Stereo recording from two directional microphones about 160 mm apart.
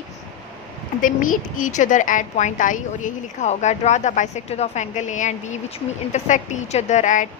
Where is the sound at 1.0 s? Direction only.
55° left (ahead or behind).